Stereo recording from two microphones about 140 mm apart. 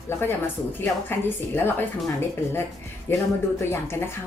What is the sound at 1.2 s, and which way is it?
Speech, 15° left (ahead or behind).